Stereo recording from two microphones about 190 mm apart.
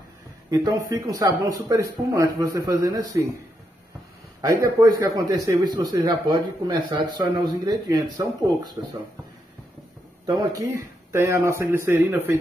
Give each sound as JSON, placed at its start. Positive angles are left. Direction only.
{"t": 0.5, "sound": "speech", "side_deg": -20}
{"t": 4.4, "sound": "speech", "side_deg": -20}
{"t": 10.2, "sound": "speech", "side_deg": -20}